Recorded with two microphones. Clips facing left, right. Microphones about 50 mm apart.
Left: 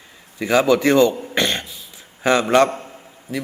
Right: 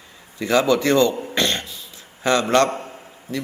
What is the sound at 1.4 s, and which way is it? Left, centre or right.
Cough, centre.